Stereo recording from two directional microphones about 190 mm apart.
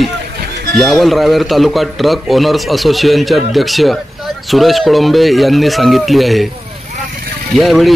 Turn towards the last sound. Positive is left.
turn(degrees=0)  # may be behind; listen again after turning